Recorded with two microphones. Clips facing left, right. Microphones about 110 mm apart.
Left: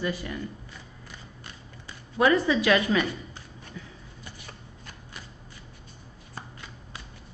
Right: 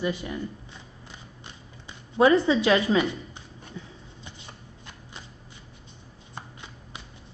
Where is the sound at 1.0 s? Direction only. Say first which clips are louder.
Even; 20° right (ahead or behind).